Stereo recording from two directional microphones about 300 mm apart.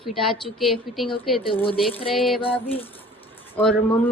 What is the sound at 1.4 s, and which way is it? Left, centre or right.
Speech, centre.